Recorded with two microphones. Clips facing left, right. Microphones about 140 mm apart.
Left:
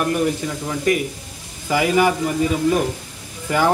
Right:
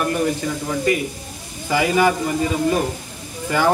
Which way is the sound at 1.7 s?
5° left (ahead or behind).